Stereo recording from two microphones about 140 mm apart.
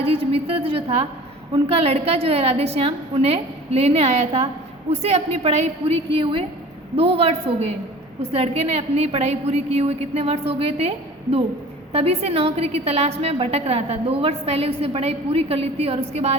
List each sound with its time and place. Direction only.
0.0 s a woman's voice: 45° right (ahead or behind)